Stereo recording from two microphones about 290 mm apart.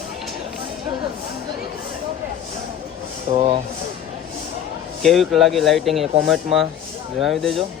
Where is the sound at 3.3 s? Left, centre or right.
Right.